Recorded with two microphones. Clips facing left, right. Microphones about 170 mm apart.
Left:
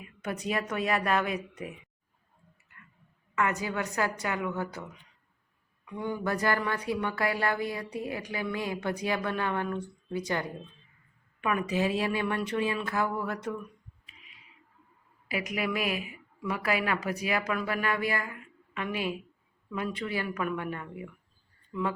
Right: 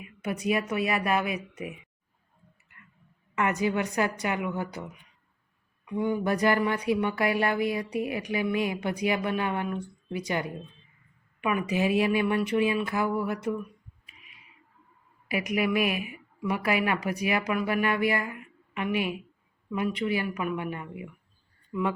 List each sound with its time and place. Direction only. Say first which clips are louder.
0.2 s speech: right 4 dB; 10° right (ahead or behind)
3.3 s speech: right 4 dB; 20° right (ahead or behind)
15.4 s speech: right 5 dB; 15° right (ahead or behind)